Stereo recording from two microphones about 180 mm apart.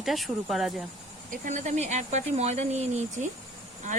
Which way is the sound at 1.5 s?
40° right (ahead or behind).